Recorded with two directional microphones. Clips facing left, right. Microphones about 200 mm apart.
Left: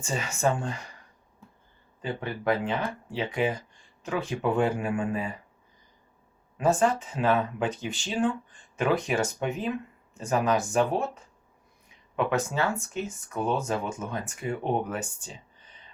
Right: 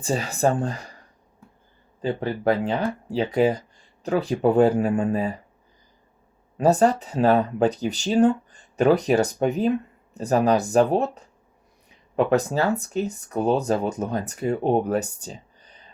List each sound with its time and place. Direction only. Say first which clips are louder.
0.0 s speech: right 5 dB; 35° right (ahead or behind)
2.0 s speech: right 7 dB; 35° right (ahead or behind)
6.6 s speech: right 5 dB; 40° right (ahead or behind)